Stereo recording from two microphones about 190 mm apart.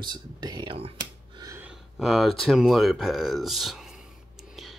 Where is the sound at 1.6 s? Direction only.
Centre (ahead or behind).